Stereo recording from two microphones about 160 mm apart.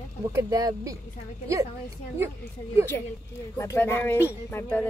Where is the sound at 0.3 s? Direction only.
20° right (ahead or behind).